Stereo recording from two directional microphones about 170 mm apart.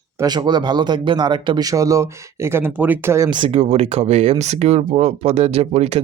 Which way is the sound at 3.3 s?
30° right (ahead or behind).